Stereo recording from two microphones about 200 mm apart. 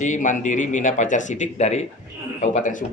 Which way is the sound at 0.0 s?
40° left (ahead or behind).